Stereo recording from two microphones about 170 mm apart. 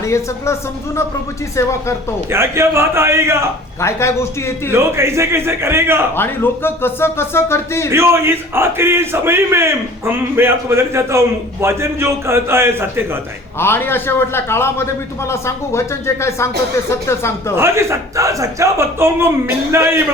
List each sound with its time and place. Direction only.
0.0 s a man's voice: 15° left (ahead or behind)
2.3 s speech: 15° right (ahead or behind)
3.8 s a man's voice: 15° left (ahead or behind)
4.7 s speech: 15° right (ahead or behind)
6.1 s a man's voice: 15° left (ahead or behind)
7.9 s speech: 15° right (ahead or behind)
13.6 s a man's voice: 15° left (ahead or behind)
17.6 s speech: 15° right (ahead or behind)